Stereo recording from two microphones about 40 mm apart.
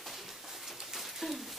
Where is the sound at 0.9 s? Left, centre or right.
Centre.